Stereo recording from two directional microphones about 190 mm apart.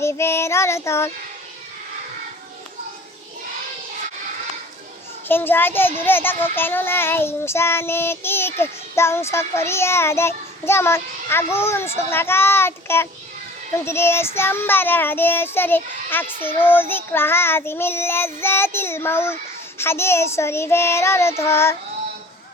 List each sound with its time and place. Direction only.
0.0 s child singing: 15° left (ahead or behind)
5.3 s child singing: 10° left (ahead or behind)